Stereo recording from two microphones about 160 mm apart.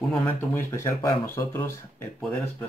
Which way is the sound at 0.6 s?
15° left (ahead or behind).